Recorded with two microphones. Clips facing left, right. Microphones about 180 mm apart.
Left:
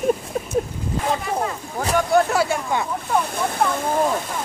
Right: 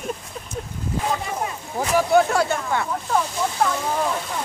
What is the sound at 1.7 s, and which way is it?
Speech, 5° right (ahead or behind).